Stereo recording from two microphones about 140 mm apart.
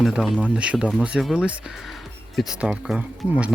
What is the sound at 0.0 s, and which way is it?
Speech, centre (ahead or behind).